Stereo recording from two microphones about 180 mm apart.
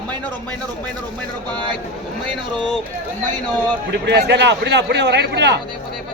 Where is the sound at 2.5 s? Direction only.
5° left (ahead or behind).